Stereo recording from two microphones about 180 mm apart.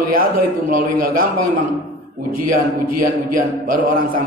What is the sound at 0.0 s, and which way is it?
A man's voice, 55° right (ahead or behind).